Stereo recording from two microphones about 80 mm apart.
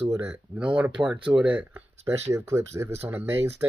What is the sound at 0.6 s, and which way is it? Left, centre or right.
Speech, centre.